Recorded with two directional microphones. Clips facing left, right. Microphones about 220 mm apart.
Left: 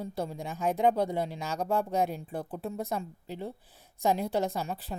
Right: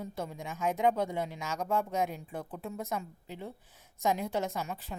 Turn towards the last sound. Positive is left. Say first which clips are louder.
# left 3 dB
turn(degrees=35)  # may be behind; listen again after turning